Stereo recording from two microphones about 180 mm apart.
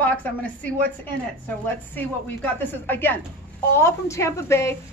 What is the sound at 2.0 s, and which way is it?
A child's voice, 10° left (ahead or behind).